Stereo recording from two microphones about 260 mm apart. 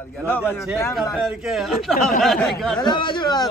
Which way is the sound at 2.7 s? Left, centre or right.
Centre.